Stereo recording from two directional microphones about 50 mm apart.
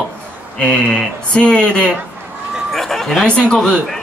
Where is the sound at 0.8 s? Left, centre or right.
Centre.